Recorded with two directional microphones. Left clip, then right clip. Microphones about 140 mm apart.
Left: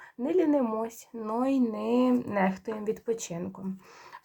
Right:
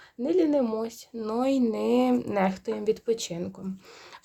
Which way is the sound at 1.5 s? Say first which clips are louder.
Right 5 dB; 45° right (ahead or behind).